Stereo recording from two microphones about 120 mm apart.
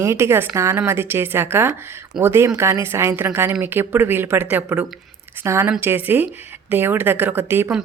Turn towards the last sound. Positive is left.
turn(degrees=-20)  # may be behind; listen again after turning